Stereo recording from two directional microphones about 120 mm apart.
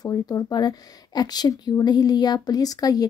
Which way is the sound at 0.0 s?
35° left (ahead or behind).